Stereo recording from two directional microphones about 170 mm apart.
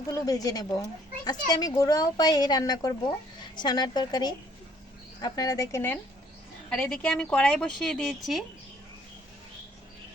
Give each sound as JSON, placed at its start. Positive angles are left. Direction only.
{"t": 0.1, "sound": "speech", "side_deg": 20}
{"t": 6.7, "sound": "speech", "side_deg": 5}